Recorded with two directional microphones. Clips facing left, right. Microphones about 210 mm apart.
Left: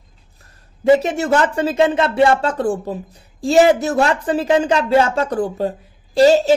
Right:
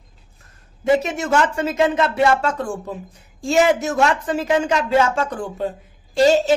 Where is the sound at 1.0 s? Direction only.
35° left (ahead or behind).